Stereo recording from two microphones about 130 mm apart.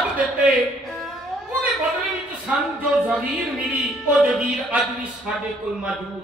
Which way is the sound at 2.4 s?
10° right (ahead or behind).